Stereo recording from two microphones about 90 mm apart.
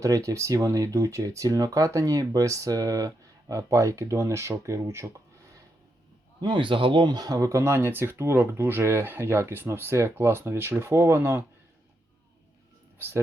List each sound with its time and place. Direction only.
0.0 s speech: 35° right (ahead or behind)
6.4 s speech: 65° right (ahead or behind); by 11.4 s 25° right (ahead or behind)